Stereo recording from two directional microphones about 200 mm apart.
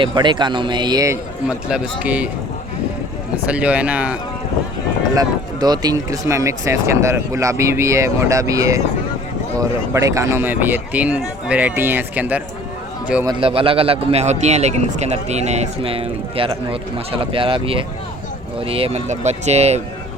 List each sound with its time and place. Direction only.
0.0 s a man's voice: 25° right (ahead or behind)
1.5 s speech: 5° right (ahead or behind)
3.5 s speech: 5° right (ahead or behind)
5.1 s speech: 20° right (ahead or behind)
13.2 s a man's voice: 25° right (ahead or behind)